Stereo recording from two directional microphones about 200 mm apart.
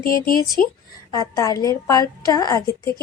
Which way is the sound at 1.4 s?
15° left (ahead or behind).